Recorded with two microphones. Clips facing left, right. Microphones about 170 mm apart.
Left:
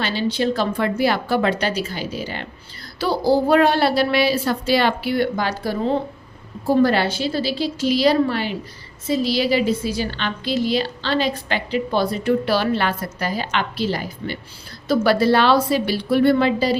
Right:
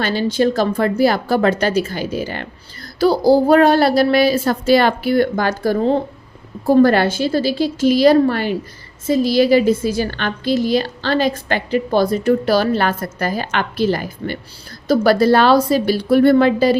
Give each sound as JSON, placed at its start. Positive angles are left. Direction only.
{"t": 0.0, "sound": "a woman's voice", "side_deg": -45}